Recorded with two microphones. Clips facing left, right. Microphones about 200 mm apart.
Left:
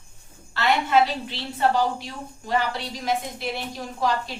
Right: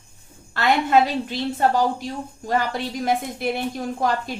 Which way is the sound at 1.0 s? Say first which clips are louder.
Right 3 dB; 45° right (ahead or behind).